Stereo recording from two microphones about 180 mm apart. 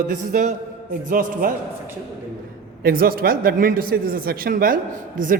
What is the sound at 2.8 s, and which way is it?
A man's voice, 55° right (ahead or behind).